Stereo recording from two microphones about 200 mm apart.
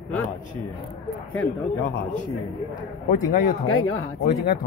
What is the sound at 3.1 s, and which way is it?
A man's voice, 40° left (ahead or behind).